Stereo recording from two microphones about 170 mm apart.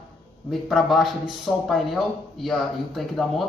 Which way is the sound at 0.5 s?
Centre (ahead or behind).